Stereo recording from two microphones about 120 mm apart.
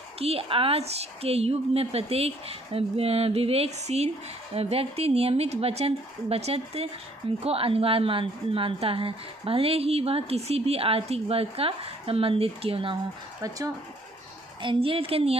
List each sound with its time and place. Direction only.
0.2 s a woman's voice: 55° right (ahead or behind)
14.6 s a woman's voice: 45° right (ahead or behind)